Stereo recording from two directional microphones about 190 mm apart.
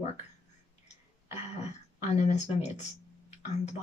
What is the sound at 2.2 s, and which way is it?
Speech, 35° left (ahead or behind).